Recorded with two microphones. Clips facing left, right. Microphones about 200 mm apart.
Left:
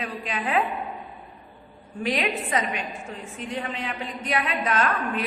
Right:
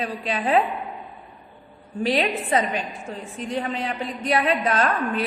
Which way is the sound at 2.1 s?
35° right (ahead or behind).